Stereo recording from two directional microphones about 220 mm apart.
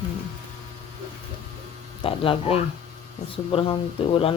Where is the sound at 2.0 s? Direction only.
25° left (ahead or behind).